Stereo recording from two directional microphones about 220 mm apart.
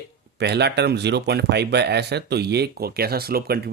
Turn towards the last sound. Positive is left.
turn(degrees=-45)  # may be behind; listen again after turning